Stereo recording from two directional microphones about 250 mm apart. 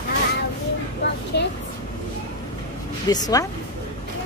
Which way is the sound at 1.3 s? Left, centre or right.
Left.